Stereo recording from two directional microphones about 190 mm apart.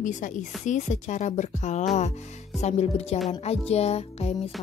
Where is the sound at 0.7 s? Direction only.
40° left (ahead or behind).